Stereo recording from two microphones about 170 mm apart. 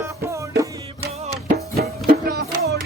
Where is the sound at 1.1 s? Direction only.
40° right (ahead or behind).